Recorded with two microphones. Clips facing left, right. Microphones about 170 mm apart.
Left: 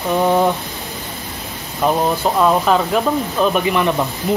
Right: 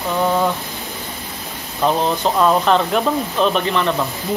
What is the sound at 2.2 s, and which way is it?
Speech, 5° left (ahead or behind).